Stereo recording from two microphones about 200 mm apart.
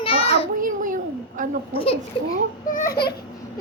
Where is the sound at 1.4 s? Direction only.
40° right (ahead or behind).